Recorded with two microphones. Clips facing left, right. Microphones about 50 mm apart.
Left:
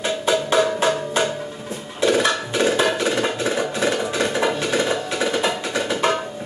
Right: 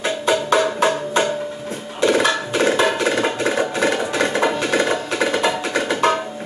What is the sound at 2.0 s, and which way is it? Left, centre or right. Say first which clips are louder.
Music: right 2 dB; right.